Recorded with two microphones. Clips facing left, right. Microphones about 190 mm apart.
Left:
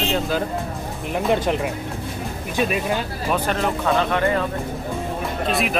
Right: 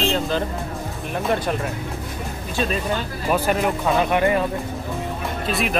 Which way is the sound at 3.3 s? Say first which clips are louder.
Right 2 dB; 10° right (ahead or behind).